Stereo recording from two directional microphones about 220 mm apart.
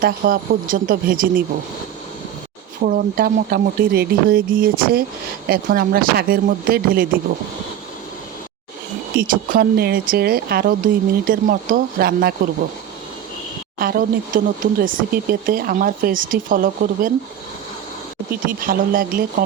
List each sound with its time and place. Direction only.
0.0 s speech: 40° right (ahead or behind)
2.8 s speech: 40° right (ahead or behind)
9.1 s speech: 40° right (ahead or behind)
13.7 s speech: 40° right (ahead or behind)
18.4 s speech: 40° right (ahead or behind)